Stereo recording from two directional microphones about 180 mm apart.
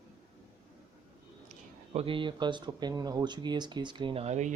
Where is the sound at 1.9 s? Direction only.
30° right (ahead or behind).